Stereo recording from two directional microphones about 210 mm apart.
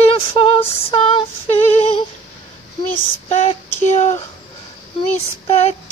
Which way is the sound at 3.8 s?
35° left (ahead or behind).